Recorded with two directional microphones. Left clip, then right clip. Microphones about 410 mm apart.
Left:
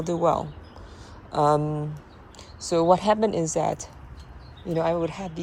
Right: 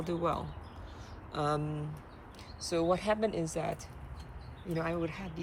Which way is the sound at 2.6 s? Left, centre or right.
Centre.